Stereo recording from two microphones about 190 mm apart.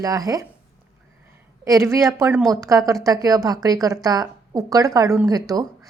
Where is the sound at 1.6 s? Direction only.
15° right (ahead or behind).